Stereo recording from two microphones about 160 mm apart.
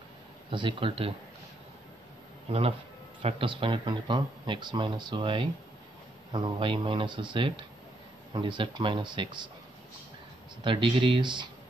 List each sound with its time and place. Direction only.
0.5 s speech: 35° right (ahead or behind)
3.2 s speech: 35° right (ahead or behind)
10.6 s speech: 35° right (ahead or behind)